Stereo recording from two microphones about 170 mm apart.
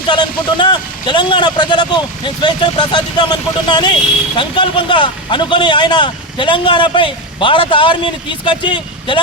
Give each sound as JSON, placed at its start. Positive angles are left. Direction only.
{"t": 0.1, "sound": "speech", "side_deg": 25}